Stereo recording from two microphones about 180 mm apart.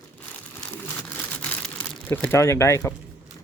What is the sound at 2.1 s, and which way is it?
Speech, 15° left (ahead or behind).